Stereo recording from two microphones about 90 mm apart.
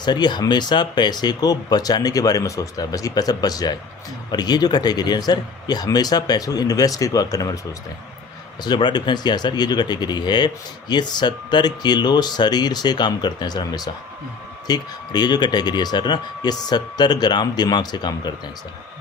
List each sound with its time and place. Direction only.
0.0 s speech: 55° left (ahead or behind)
8.6 s speech: 55° left (ahead or behind)